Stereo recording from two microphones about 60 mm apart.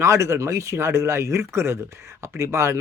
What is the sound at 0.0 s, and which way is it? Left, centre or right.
Speech, right.